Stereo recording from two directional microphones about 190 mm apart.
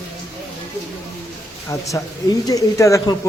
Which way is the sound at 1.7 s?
15° left (ahead or behind).